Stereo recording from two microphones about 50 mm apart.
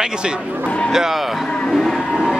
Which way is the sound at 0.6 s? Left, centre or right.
Left.